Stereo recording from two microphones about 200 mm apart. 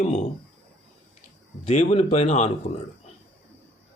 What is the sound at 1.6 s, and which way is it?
Speech, 30° left (ahead or behind).